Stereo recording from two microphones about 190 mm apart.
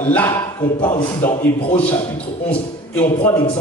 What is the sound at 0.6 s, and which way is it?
Speech, 25° left (ahead or behind).